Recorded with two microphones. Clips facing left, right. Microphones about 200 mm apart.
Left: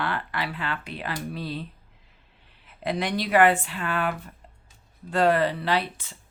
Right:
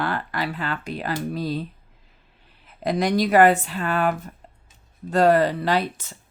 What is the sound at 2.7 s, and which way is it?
Speech, 40° right (ahead or behind).